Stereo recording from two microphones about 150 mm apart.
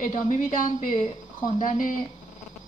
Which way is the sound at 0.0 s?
55° left (ahead or behind).